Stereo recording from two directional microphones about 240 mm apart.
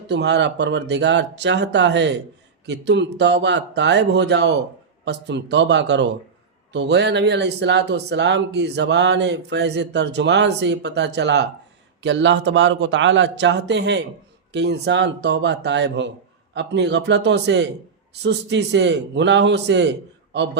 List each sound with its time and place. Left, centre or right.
0.1 s speech: right